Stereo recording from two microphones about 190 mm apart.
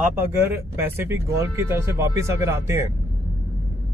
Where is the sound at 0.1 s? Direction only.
10° right (ahead or behind).